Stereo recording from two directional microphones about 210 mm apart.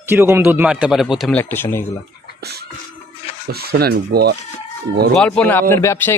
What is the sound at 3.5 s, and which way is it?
Speech, 50° right (ahead or behind).